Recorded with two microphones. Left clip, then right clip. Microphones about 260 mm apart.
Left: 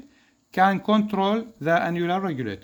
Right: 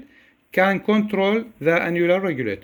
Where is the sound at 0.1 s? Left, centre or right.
Centre.